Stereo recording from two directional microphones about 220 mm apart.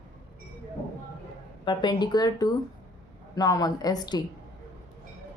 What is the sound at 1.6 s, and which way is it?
A woman's voice, 20° left (ahead or behind).